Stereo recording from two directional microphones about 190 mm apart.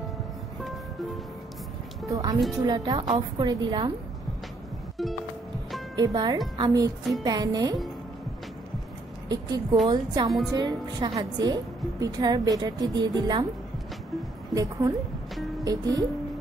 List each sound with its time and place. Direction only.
2.0 s a woman's voice: 15° right (ahead or behind)
5.9 s a woman's voice: 20° right (ahead or behind)
9.3 s a woman's voice: 20° right (ahead or behind)
14.5 s a woman's voice: 20° right (ahead or behind)